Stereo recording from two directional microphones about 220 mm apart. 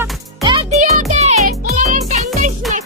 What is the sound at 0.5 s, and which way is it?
Music, 30° right (ahead or behind).